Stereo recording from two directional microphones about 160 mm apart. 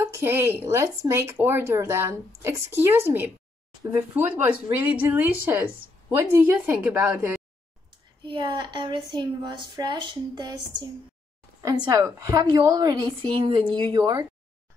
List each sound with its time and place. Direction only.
0.0 s a woman's voice: 15° right (ahead or behind)
8.3 s a woman's voice: 30° right (ahead or behind)